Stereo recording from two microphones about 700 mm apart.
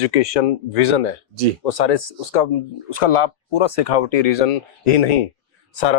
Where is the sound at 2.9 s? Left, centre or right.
Left.